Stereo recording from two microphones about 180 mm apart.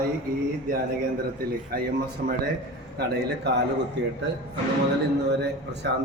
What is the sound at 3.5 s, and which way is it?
Speech, 70° right (ahead or behind).